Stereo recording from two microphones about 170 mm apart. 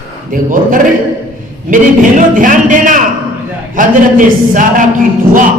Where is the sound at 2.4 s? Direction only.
50° right (ahead or behind).